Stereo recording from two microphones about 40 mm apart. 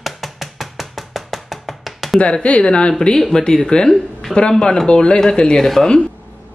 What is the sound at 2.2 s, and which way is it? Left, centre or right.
Speech, left.